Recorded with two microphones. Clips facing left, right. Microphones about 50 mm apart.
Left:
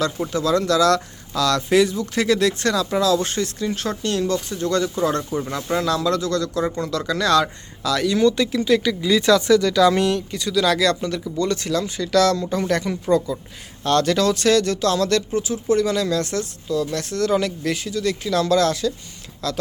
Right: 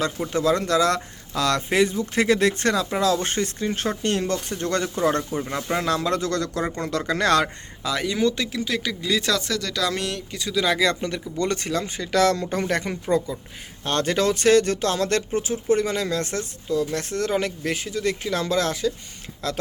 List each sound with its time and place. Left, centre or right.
0.3 s speech: right
7.8 s speech: right
8.2 s speech: centre
10.5 s speech: centre
11.3 s speech: right